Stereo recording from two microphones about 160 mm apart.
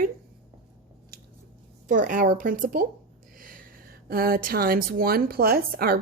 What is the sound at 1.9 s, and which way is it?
Speech, 55° right (ahead or behind).